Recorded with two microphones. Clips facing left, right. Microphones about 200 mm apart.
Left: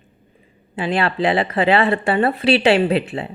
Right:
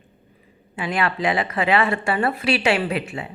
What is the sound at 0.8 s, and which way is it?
Speech, 30° left (ahead or behind).